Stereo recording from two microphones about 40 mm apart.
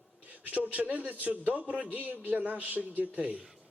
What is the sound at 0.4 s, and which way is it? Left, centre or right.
A man's voice, right.